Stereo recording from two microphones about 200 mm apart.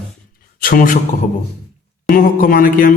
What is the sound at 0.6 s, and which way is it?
Speech, 45° left (ahead or behind).